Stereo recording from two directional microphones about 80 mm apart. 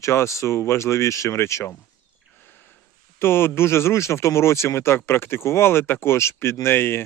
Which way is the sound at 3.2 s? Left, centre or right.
Left.